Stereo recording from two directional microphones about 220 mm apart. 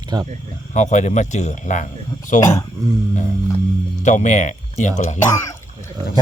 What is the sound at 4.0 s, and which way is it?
Speech, 35° left (ahead or behind).